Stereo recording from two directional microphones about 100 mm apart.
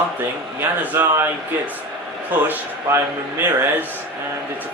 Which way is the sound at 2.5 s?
20° right (ahead or behind).